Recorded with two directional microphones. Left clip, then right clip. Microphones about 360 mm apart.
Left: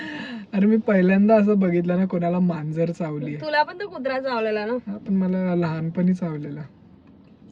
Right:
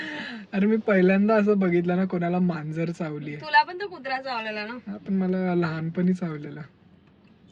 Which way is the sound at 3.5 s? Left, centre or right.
Centre.